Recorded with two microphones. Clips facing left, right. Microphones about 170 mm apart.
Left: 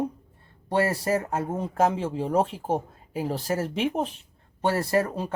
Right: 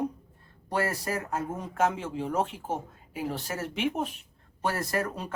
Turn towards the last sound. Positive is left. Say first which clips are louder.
# left 6 dB
turn(degrees=30)  # may be behind; listen again after turning